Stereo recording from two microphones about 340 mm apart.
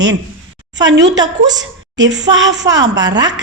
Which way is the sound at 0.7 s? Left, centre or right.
Right.